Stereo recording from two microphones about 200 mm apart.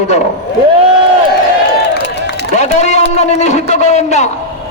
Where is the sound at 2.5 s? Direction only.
35° left (ahead or behind).